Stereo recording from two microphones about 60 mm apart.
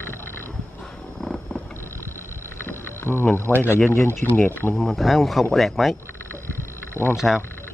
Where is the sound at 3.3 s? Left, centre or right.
Left.